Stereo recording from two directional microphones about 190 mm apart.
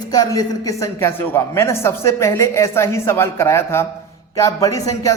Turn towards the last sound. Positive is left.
turn(degrees=15)  # may be behind; listen again after turning